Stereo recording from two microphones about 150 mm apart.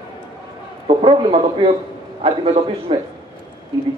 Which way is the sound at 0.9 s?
40° right (ahead or behind).